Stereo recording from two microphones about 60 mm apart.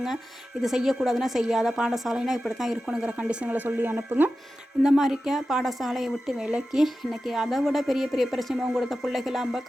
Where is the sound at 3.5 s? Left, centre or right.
Right.